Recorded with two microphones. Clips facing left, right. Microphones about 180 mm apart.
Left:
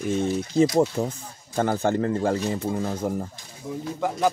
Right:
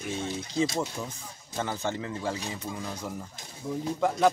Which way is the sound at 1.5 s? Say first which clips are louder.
Left 9 dB; 50° left (ahead or behind).